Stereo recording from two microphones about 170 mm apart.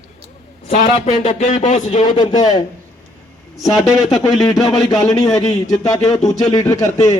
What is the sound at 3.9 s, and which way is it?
Speech, 5° right (ahead or behind).